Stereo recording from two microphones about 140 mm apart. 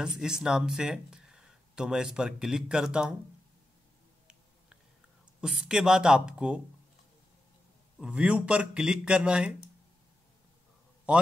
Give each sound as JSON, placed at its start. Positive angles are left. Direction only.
{"t": 0.0, "sound": "speech", "side_deg": -5}
{"t": 5.4, "sound": "speech", "side_deg": -5}
{"t": 8.0, "sound": "speech", "side_deg": -5}